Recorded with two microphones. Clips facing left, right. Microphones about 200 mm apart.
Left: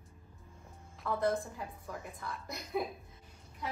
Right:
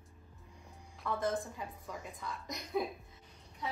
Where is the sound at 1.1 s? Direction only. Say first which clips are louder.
Left 3 dB; centre (ahead or behind).